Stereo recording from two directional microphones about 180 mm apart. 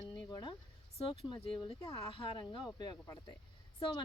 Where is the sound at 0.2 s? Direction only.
25° left (ahead or behind).